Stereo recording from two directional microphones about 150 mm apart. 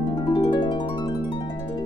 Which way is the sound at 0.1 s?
30° left (ahead or behind).